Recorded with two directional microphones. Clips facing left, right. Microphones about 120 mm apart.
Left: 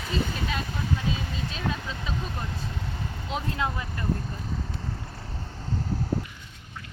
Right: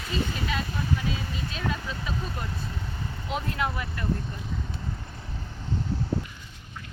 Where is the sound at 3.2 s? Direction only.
20° left (ahead or behind).